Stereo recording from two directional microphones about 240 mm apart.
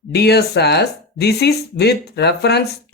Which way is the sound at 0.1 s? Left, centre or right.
Left.